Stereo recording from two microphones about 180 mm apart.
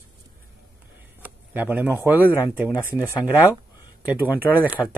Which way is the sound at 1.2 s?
10° right (ahead or behind).